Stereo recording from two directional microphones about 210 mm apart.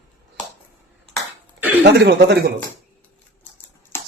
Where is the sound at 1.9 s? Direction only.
50° right (ahead or behind).